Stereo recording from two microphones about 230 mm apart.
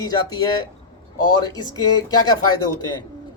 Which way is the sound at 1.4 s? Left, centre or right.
Centre.